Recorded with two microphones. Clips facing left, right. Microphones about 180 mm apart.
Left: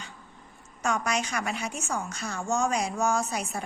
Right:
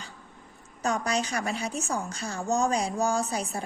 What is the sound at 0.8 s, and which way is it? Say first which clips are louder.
Mantra: right 1 dB; 35° right (ahead or behind).